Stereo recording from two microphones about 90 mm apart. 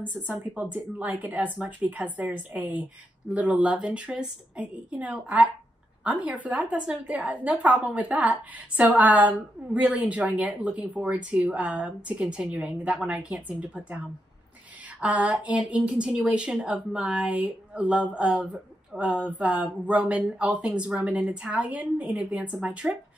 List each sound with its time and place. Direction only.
0.3 s speech: 20° right (ahead or behind)